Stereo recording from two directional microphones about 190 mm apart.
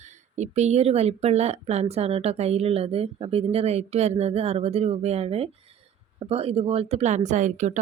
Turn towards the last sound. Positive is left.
turn(degrees=-40)  # may be behind; listen again after turning